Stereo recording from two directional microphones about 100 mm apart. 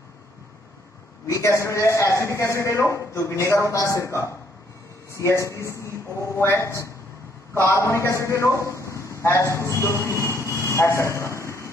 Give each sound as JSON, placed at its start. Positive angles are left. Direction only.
{"t": 1.2, "sound": "a man's voice", "side_deg": 30}
{"t": 10.5, "sound": "vehicle", "side_deg": 30}